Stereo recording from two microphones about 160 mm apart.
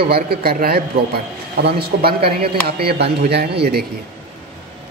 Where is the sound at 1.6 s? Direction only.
85° right.